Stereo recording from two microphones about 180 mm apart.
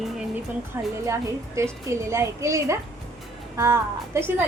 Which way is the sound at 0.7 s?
15° right (ahead or behind).